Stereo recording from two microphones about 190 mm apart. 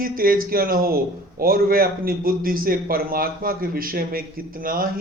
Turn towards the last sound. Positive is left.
turn(degrees=-50)  # may be behind; listen again after turning